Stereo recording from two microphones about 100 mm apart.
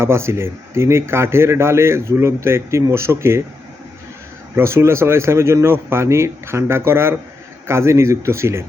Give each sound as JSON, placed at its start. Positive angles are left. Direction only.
{"t": 0.0, "sound": "speech", "side_deg": -25}
{"t": 4.5, "sound": "speech", "side_deg": -25}